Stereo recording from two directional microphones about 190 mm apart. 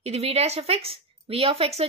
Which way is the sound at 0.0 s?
35° right (ahead or behind).